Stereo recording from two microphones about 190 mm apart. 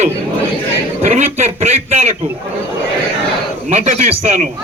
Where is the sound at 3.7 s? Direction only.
35° right (ahead or behind).